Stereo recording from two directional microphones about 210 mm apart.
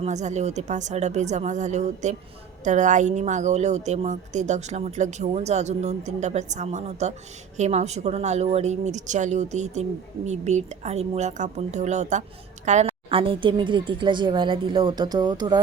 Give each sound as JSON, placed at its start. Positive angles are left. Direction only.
{"t": 0.0, "sound": "a woman's voice", "side_deg": -35}